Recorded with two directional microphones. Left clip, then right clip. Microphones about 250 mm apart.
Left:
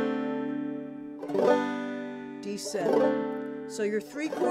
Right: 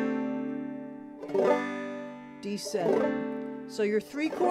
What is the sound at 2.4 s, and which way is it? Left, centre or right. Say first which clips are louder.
Speech: right 1 dB; right.